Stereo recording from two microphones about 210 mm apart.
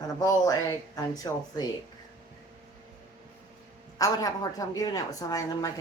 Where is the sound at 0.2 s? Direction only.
15° left (ahead or behind).